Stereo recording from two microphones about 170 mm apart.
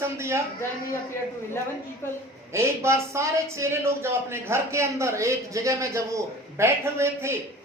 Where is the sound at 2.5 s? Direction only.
15° right (ahead or behind).